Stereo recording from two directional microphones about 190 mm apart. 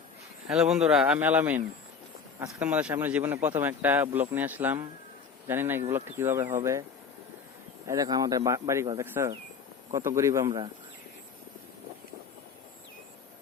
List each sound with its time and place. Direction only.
0.4 s speech: 5° right (ahead or behind)
7.9 s speech: 20° right (ahead or behind)